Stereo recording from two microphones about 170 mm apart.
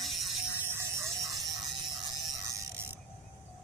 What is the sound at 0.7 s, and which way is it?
Ratchet, 15° right (ahead or behind).